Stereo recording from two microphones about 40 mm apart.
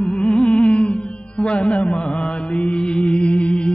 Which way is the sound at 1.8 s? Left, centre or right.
Left.